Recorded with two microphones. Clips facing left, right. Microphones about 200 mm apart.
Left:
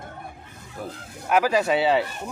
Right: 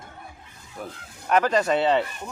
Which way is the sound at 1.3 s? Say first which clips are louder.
Even; 5° left (ahead or behind).